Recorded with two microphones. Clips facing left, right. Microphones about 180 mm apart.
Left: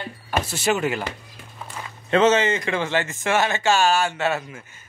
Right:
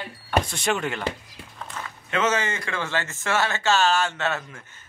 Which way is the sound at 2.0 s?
30° left (ahead or behind).